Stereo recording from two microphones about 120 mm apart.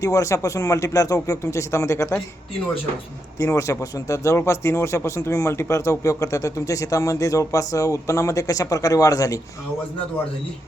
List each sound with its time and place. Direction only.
0.0 s a man's voice: 25° left (ahead or behind)
3.3 s a man's voice: 25° left (ahead or behind)